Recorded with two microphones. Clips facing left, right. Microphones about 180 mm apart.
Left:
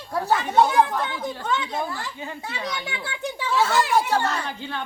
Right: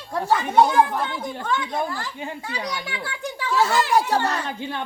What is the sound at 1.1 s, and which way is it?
Speech, 15° right (ahead or behind).